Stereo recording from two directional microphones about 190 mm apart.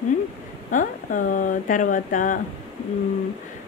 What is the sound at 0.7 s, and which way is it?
Speech, 45° left (ahead or behind).